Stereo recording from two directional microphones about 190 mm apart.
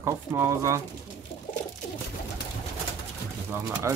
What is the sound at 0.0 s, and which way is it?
Speech, 15° right (ahead or behind).